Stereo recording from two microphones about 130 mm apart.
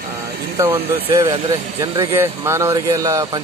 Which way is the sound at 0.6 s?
15° right (ahead or behind).